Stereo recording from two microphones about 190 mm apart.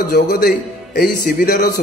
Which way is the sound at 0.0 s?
55° left (ahead or behind).